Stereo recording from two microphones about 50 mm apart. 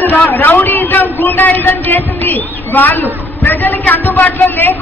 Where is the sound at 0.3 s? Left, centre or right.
Left.